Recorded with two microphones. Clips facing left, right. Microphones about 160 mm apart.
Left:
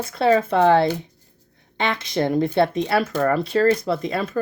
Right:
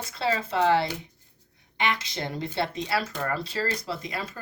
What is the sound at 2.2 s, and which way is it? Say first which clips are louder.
Speech: left 11 dB; 55° left (ahead or behind).